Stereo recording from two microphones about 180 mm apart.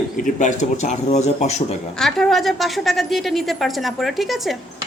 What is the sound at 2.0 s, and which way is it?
A woman's voice, centre (ahead or behind).